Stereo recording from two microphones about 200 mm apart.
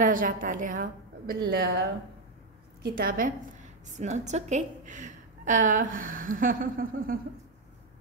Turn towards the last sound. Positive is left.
turn(degrees=-45)  # may be behind; listen again after turning